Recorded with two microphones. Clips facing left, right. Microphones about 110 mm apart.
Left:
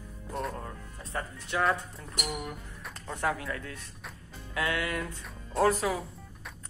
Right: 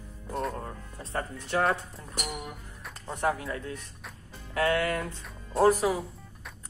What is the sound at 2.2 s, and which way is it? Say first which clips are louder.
Music: left 3 dB; centre (ahead or behind).